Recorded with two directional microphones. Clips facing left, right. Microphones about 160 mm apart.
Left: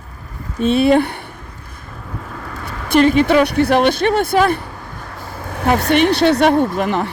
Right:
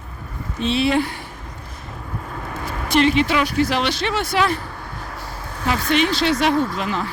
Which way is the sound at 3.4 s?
65° left (ahead or behind).